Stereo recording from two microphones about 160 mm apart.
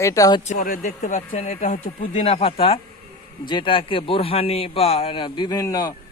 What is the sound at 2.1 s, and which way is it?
A man's voice, 40° left (ahead or behind).